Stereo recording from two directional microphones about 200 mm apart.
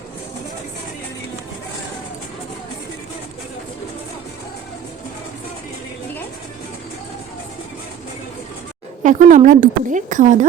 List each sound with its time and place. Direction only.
9.0 s speech: 40° right (ahead or behind)